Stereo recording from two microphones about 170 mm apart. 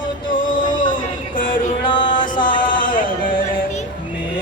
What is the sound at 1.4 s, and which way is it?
Music, 30° left (ahead or behind).